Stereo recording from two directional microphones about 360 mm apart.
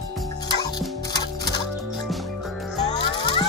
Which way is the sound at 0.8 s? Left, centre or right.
Centre.